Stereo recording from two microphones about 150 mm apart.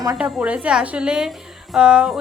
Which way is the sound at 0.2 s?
5° right (ahead or behind).